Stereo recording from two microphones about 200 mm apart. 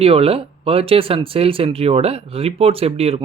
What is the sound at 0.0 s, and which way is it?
Speech, 30° right (ahead or behind).